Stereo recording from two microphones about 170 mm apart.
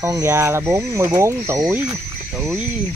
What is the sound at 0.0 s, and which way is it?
Speech, 15° right (ahead or behind).